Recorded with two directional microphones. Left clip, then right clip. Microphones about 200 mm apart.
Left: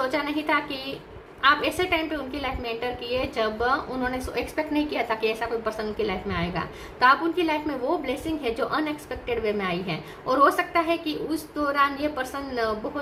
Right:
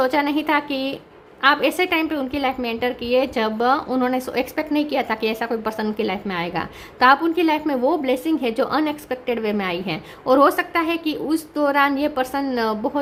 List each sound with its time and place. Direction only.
0.0 s a woman's voice: 55° right (ahead or behind)